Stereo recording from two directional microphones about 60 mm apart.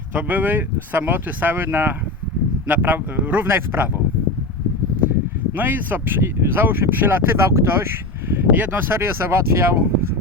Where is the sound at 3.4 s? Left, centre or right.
Right.